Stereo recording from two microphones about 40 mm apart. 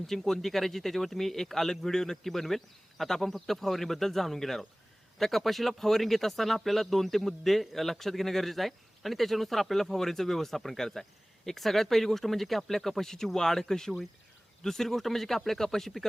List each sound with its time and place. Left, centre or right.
0.1 s speech: centre